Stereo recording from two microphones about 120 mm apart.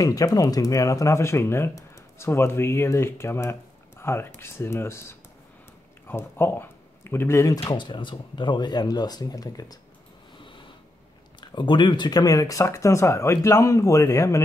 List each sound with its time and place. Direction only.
0.0 s speech: 30° left (ahead or behind)
7.7 s speech: 40° left (ahead or behind)
11.4 s speech: 40° left (ahead or behind)